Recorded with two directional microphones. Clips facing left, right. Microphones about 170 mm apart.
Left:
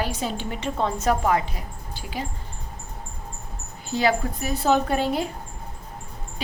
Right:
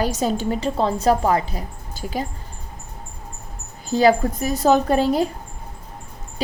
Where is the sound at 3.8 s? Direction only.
40° right (ahead or behind).